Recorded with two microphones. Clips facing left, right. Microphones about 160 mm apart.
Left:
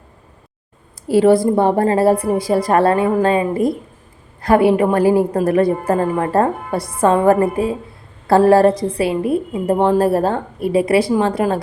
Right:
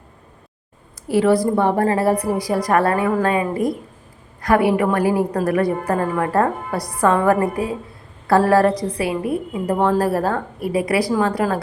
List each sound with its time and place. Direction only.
1.0 s a woman's voice: 30° left (ahead or behind)